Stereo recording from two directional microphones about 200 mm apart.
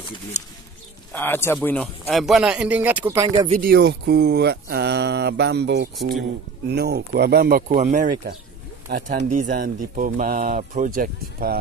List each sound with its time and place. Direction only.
1.1 s speech: 10° left (ahead or behind); by 3.3 s 10° right (ahead or behind)
3.4 s speech: 35° right (ahead or behind)
3.7 s speech: 50° right (ahead or behind)
7.7 s speech: 35° right (ahead or behind)